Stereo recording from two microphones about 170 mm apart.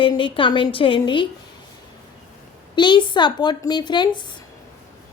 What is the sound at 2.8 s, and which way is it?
Speech, 30° left (ahead or behind).